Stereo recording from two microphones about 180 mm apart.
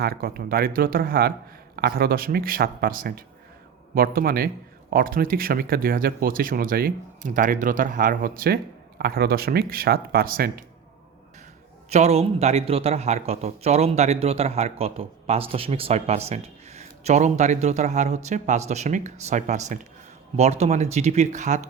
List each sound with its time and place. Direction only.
0.0 s a man's voice: 60° right (ahead or behind)
11.9 s speech: 35° right (ahead or behind)